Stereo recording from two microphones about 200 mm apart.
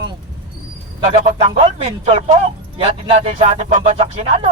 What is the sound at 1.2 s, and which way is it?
A man's voice, 30° right (ahead or behind).